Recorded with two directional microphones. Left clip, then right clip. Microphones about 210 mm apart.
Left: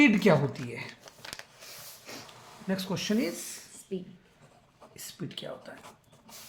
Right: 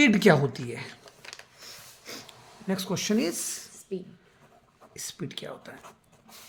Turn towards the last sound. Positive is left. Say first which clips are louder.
# right 2 dB
turn(degrees=-50)  # may be behind; listen again after turning